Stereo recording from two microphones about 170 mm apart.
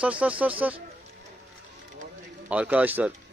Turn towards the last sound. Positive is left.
turn(degrees=-10)  # may be behind; listen again after turning